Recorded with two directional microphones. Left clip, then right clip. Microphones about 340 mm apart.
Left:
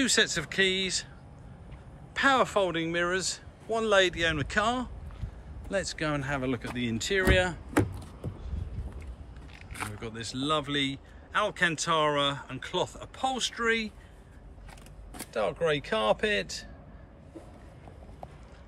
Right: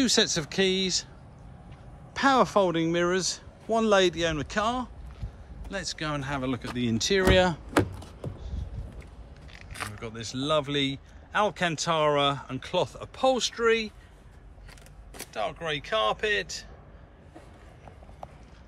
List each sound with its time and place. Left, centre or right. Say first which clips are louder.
0.0 s speech: right 1 dB; centre
2.1 s speech: right 2 dB; centre
9.5 s speech: right 1 dB; centre
15.1 s speech: left 2 dB; centre